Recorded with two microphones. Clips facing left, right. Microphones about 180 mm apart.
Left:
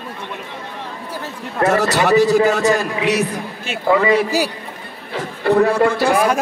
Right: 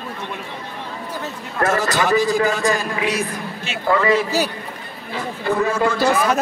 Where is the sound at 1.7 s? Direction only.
65° left (ahead or behind).